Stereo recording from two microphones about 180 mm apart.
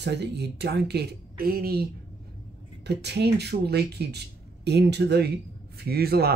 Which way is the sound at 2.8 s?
65° right (ahead or behind).